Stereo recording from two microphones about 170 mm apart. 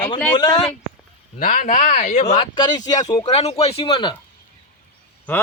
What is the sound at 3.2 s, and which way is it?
Speech, 35° left (ahead or behind).